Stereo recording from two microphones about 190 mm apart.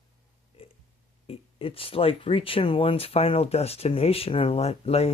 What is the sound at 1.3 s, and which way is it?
Speech, 30° left (ahead or behind).